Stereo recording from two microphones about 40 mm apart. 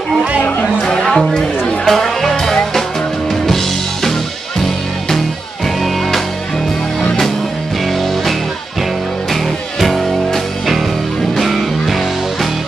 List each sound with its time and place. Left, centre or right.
0.1 s speech: right
0.7 s music: left; by 4.1 s centre
9.3 s music: centre